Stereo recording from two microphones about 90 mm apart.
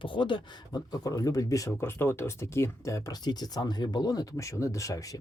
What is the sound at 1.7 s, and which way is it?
Speech, 25° left (ahead or behind).